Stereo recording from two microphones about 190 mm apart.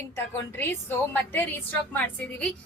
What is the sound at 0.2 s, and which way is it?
A woman's voice, 10° left (ahead or behind).